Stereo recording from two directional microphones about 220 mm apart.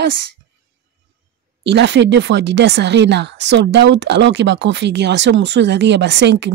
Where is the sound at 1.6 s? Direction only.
50° right (ahead or behind).